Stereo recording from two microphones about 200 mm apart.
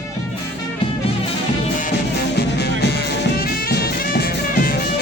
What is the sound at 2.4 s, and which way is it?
Music, 55° left (ahead or behind).